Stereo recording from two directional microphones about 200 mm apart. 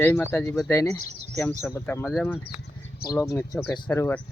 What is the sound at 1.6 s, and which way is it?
Speech, 5° left (ahead or behind).